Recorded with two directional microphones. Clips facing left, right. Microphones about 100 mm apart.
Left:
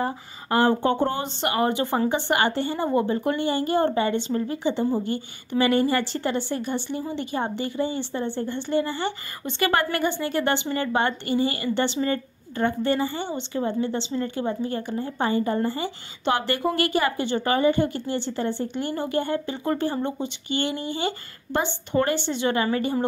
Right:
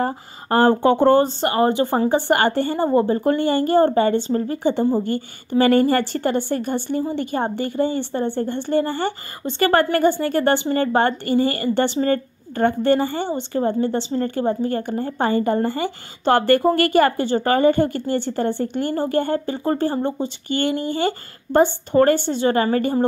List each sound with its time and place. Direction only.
0.0 s speech: 45° right (ahead or behind)
0.8 s speech: 85° right
1.1 s a woman's voice: 40° right (ahead or behind)
20.8 s speech: 50° right (ahead or behind)